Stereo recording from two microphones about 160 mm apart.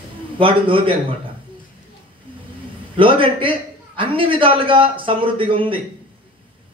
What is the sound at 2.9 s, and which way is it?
A man's voice, 35° right (ahead or behind).